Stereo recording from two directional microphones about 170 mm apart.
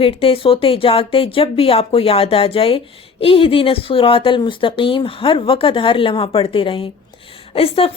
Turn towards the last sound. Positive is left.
turn(degrees=35)  # may be behind; listen again after turning